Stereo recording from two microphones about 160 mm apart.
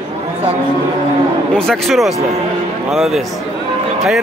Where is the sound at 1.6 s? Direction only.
Centre (ahead or behind).